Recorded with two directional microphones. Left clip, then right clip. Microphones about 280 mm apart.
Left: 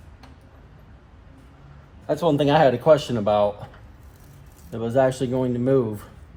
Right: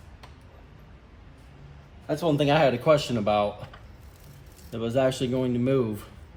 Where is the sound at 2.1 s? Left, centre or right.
Centre.